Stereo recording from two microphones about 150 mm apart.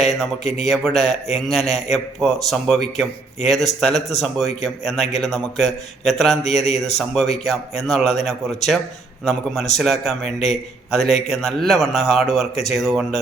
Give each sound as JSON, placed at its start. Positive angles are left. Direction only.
{"t": 0.0, "sound": "speech", "side_deg": 0}
{"t": 0.4, "sound": "a man's voice", "side_deg": 45}
{"t": 0.7, "sound": "speech", "side_deg": 0}
{"t": 6.4, "sound": "a man's voice", "side_deg": 45}
{"t": 7.0, "sound": "a man's voice", "side_deg": 0}